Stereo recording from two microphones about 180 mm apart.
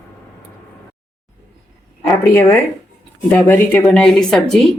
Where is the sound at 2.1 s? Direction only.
15° left (ahead or behind).